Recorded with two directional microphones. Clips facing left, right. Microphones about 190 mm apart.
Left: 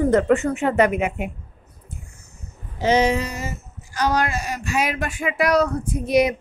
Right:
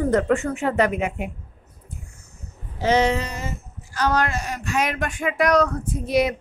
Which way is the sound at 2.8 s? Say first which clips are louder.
Left 1 dB; 15° left (ahead or behind).